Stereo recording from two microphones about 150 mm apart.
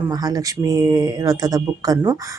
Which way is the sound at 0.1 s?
25° right (ahead or behind).